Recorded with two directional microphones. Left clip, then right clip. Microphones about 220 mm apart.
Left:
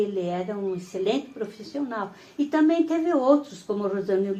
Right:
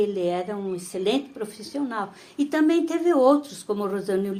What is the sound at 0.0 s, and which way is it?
Speech, 50° right (ahead or behind).